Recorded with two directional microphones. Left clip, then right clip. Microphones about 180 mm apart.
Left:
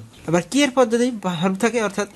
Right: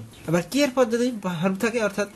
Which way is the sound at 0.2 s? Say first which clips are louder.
Left 3 dB; 25° left (ahead or behind).